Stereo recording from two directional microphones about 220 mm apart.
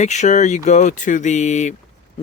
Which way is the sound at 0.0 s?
30° left (ahead or behind).